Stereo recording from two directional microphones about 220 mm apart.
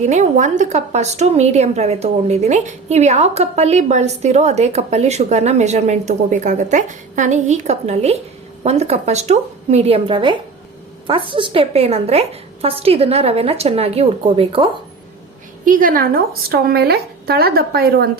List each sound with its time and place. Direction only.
0.0 s a woman's voice: 30° right (ahead or behind)
15.6 s a woman's voice: 40° right (ahead or behind)